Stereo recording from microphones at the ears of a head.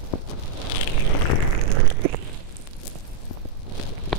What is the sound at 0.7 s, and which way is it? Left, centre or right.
Vehicle, left.